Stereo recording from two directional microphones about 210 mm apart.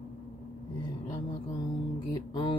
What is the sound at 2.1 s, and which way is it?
Speech, 20° left (ahead or behind).